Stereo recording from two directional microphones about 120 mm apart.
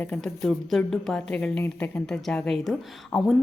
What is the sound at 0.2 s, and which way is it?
A woman's voice, centre (ahead or behind).